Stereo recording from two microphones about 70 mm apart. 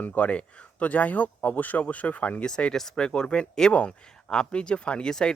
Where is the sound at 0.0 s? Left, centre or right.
Centre.